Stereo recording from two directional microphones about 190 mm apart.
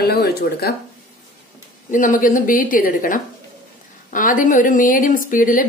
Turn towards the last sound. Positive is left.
turn(degrees=45)  # may be behind; listen again after turning